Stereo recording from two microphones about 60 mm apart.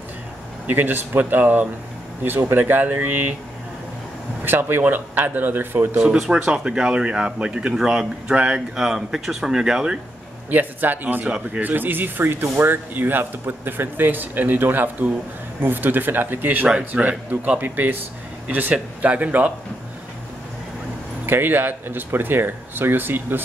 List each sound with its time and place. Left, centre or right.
0.7 s speech: right
4.5 s speech: right
6.3 s speech: centre
8.4 s speech: centre
8.7 s speech: centre
10.5 s speech: right
16.6 s speech: right
21.3 s speech: right